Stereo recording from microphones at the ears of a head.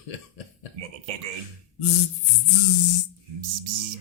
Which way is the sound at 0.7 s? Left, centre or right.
Right.